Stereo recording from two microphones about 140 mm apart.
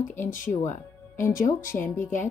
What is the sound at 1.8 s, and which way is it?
Speech, 15° left (ahead or behind).